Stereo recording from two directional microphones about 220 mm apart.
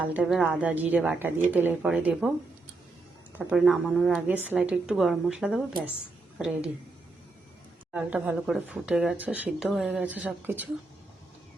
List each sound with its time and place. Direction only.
0.1 s speech: 5° right (ahead or behind)
3.3 s speech: 5° right (ahead or behind)
7.9 s speech: 5° right (ahead or behind)